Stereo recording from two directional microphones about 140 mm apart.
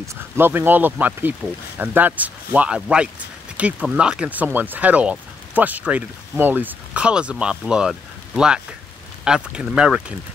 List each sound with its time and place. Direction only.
0.0 s speech: 20° right (ahead or behind)
9.2 s speech: 5° right (ahead or behind)